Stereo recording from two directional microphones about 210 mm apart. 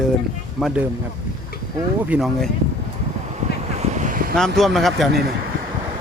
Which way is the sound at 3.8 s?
35° right (ahead or behind).